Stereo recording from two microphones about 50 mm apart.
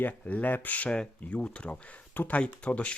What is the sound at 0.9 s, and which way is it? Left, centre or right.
Speech, left.